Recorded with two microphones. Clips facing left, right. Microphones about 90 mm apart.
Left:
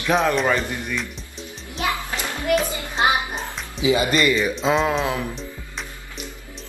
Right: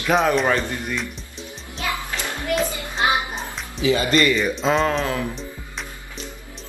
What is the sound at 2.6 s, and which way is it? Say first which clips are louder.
Child singing: right 2 dB; 20° left (ahead or behind).